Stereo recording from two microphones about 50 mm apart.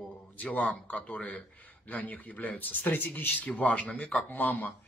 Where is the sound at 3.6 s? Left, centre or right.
Left.